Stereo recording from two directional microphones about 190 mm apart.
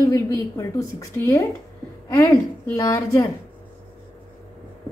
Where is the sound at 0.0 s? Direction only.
15° left (ahead or behind).